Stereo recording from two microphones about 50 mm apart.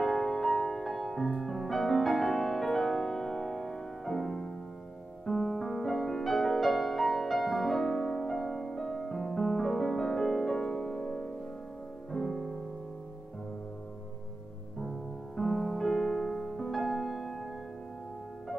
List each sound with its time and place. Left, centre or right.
0.0 s music: centre
14.8 s music: centre